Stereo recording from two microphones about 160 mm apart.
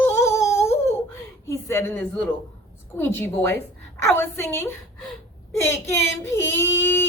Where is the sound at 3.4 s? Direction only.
15° left (ahead or behind).